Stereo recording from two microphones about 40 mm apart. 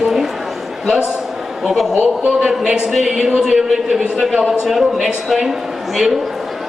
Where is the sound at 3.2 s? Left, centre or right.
Centre.